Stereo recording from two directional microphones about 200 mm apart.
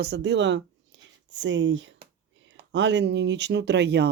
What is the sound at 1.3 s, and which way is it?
Speech, 65° right (ahead or behind).